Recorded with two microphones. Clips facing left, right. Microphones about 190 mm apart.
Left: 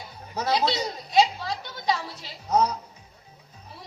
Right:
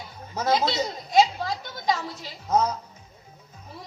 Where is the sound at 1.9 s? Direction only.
45° right (ahead or behind).